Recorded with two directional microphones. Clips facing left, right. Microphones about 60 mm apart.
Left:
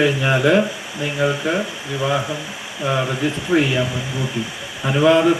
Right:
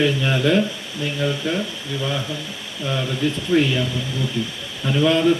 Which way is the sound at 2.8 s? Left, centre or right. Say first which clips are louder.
Left 3 dB; left.